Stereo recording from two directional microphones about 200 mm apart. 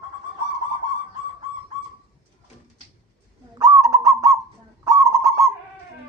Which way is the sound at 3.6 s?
15° right (ahead or behind).